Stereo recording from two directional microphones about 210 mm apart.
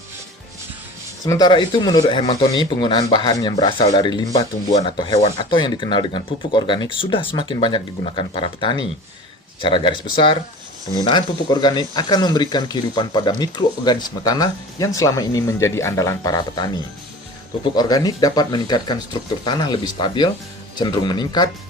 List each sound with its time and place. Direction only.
1.2 s speech: 20° left (ahead or behind)